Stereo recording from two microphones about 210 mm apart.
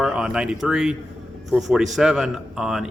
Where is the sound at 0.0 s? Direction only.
5° right (ahead or behind).